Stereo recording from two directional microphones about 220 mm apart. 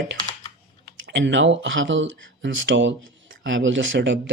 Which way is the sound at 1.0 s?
60° right (ahead or behind).